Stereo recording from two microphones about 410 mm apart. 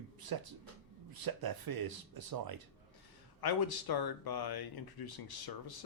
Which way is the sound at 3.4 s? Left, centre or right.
Left.